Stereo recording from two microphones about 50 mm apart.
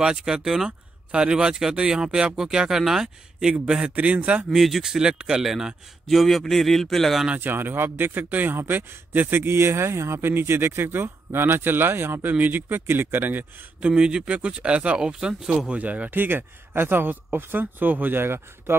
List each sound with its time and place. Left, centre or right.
0.0 s speech: centre
0.7 s speech: right
3.8 s speech: right
4.5 s speech: centre
6.0 s speech: centre
7.3 s a man's voice: right
12.2 s speech: right
13.7 s speech: right
16.2 s a man's voice: right